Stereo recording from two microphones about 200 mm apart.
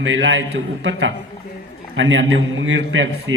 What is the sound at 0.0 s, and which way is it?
A man's voice, 70° right (ahead or behind).